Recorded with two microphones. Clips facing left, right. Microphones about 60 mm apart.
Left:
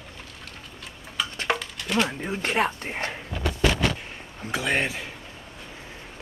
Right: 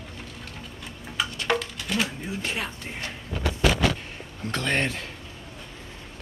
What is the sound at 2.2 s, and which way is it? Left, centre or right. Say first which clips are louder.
Speech: left 6 dB; left.